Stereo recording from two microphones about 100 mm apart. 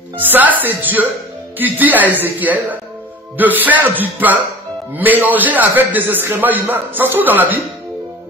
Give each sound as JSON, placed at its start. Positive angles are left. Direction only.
{"t": 0.2, "sound": "a woman's voice", "side_deg": -20}